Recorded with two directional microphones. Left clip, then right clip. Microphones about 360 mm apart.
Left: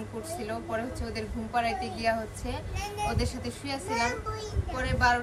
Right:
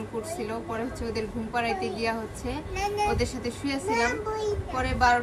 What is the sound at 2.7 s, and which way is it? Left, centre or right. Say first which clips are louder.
Speech: right 8 dB; right.